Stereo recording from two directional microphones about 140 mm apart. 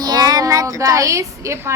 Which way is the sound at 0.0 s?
30° right (ahead or behind).